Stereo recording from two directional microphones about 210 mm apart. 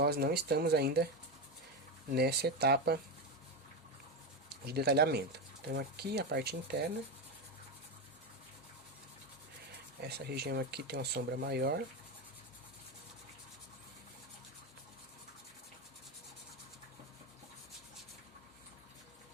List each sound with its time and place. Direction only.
0.0 s speech: 50° right (ahead or behind)
2.1 s speech: 50° right (ahead or behind)
4.4 s speech: 50° right (ahead or behind)
10.0 s speech: 50° right (ahead or behind)